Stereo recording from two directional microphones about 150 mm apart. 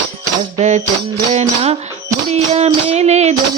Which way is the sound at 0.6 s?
50° right (ahead or behind).